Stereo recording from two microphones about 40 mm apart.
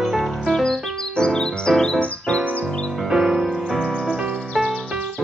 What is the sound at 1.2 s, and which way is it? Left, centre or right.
Music, centre.